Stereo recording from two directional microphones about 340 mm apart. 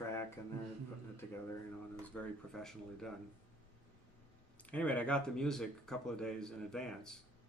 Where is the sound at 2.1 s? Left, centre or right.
Centre.